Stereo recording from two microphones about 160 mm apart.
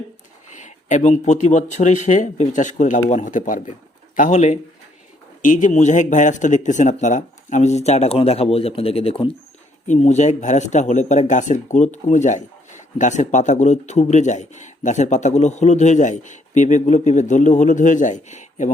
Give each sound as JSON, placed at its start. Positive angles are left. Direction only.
{"t": 0.5, "sound": "speech", "side_deg": 50}
{"t": 9.8, "sound": "speech", "side_deg": 45}